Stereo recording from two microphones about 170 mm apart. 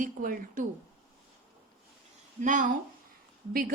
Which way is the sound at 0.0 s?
55° right (ahead or behind).